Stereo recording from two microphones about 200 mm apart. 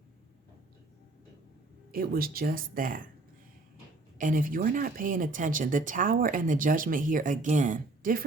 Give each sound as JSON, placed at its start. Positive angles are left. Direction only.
{"t": 1.9, "sound": "speech", "side_deg": -50}
{"t": 4.2, "sound": "speech", "side_deg": -40}